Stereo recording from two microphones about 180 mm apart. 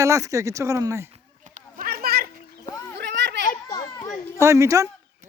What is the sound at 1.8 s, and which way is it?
Children playing, 55° right (ahead or behind).